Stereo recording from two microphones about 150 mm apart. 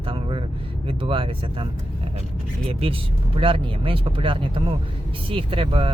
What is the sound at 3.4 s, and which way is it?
Speech, 35° right (ahead or behind).